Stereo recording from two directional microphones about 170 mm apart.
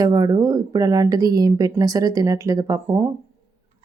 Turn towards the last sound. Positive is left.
turn(degrees=-15)  # may be behind; listen again after turning